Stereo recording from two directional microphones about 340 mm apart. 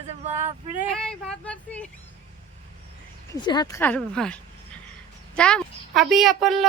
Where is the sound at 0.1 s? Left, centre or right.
Centre.